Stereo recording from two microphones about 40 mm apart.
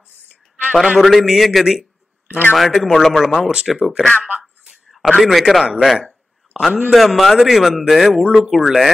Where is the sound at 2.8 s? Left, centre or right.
Centre.